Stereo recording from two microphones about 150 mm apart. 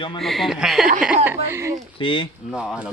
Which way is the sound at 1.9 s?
35° left (ahead or behind).